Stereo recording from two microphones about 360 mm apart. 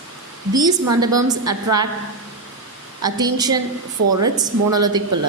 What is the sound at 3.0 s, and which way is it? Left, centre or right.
Speech, centre.